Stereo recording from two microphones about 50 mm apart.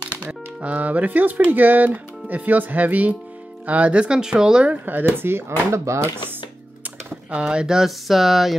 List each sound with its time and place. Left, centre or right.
0.1 s speech: right
4.6 s speech: right
5.9 s speech: right
7.2 s speech: right; by 8.5 s centre